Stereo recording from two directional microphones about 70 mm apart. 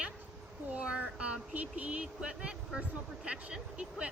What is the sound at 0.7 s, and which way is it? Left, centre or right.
A woman's voice, centre.